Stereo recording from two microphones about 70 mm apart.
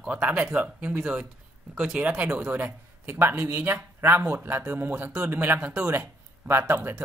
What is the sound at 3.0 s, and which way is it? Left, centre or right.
Speech, right.